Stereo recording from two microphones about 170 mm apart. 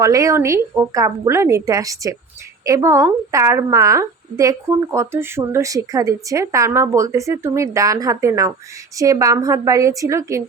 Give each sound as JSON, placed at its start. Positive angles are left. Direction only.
{"t": 0.0, "sound": "a woman's voice", "side_deg": -20}